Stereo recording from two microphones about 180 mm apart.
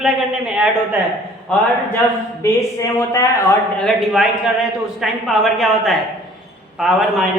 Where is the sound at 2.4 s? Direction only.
15° left (ahead or behind).